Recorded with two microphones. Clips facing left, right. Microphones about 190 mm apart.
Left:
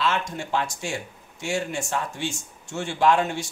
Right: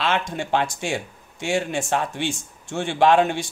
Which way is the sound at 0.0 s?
65° right (ahead or behind).